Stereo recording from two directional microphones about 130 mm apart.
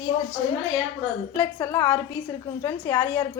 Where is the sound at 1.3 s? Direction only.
30° left (ahead or behind).